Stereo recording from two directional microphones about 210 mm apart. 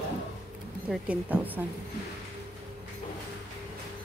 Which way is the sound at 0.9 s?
5° right (ahead or behind).